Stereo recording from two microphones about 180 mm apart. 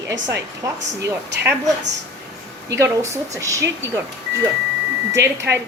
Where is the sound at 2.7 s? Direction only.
15° right (ahead or behind).